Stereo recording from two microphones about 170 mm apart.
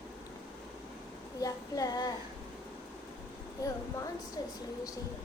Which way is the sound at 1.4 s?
20° left (ahead or behind).